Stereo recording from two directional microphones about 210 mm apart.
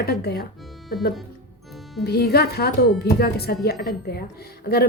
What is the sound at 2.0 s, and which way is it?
A woman's voice, 50° left (ahead or behind).